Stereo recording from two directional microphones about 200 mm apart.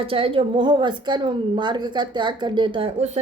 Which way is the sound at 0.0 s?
25° right (ahead or behind).